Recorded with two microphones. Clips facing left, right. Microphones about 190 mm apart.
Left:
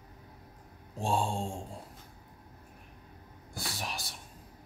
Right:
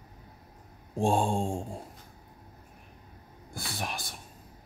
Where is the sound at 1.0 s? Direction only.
50° right (ahead or behind).